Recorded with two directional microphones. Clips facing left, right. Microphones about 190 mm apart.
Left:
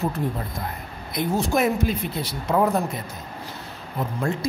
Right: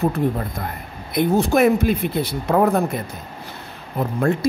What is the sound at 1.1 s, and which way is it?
A man's voice, 60° right (ahead or behind).